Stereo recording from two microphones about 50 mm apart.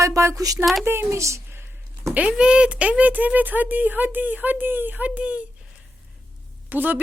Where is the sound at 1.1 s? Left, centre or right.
Right.